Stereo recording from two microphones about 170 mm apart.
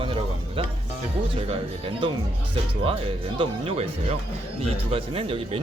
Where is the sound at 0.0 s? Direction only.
30° right (ahead or behind).